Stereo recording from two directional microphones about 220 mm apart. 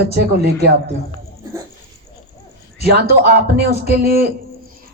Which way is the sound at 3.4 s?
45° right (ahead or behind).